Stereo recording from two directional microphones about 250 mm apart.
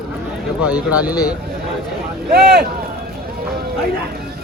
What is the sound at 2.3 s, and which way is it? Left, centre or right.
Speech, right.